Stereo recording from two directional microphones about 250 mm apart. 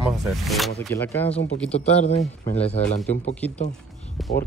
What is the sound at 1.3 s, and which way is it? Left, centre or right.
Speech, left.